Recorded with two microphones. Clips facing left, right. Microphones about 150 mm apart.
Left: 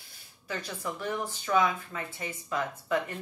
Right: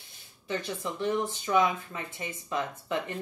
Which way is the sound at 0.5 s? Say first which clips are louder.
Right 3 dB; 25° right (ahead or behind).